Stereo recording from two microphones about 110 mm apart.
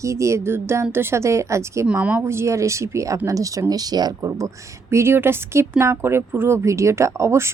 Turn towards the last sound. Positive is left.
turn(degrees=-25)  # may be behind; listen again after turning